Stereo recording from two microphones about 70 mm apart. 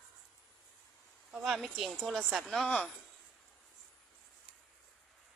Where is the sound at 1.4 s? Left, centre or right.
Centre.